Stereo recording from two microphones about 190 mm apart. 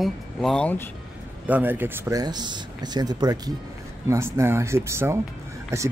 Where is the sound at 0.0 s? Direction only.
Centre (ahead or behind).